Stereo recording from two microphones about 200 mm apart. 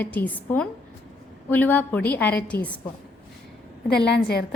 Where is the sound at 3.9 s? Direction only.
55° left (ahead or behind).